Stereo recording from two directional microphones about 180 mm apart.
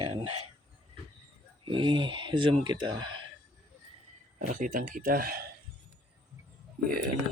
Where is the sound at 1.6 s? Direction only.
30° right (ahead or behind).